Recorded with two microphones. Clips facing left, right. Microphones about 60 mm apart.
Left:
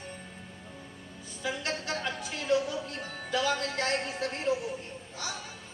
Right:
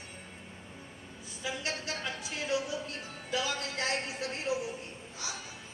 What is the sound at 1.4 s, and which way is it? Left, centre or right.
Music, left.